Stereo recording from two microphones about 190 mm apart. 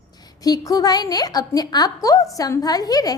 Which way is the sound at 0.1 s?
20° left (ahead or behind).